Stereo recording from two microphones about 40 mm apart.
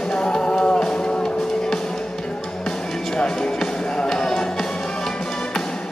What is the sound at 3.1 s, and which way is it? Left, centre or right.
Music, centre.